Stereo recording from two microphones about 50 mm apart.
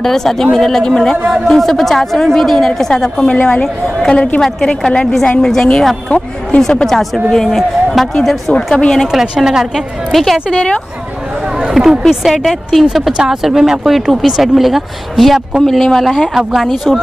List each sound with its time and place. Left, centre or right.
0.0 s a woman's voice: centre
3.3 s a woman's voice: left
4.4 s a woman's voice: centre
6.0 s speech: left
6.6 s a woman's voice: centre
9.0 s a woman's voice: centre
9.8 s speech: centre
10.5 s speech: left
11.5 s chatter: centre
12.1 s speech: centre